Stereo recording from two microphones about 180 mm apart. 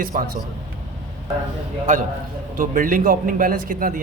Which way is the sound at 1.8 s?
45° right (ahead or behind).